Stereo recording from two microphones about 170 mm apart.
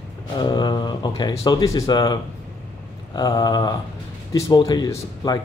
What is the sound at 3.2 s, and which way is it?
Speech, 20° left (ahead or behind).